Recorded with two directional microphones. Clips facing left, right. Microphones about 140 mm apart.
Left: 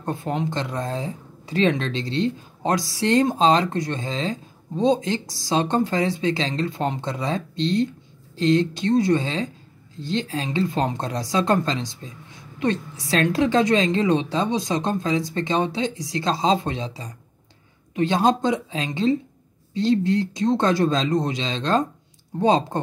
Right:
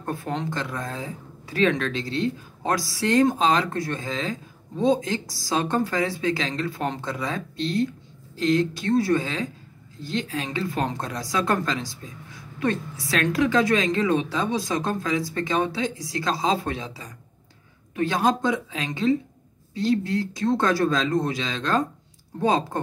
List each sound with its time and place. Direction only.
0.0 s a woman's voice: 20° left (ahead or behind)